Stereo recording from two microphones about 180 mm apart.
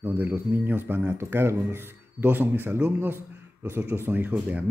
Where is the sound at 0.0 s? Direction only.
10° right (ahead or behind).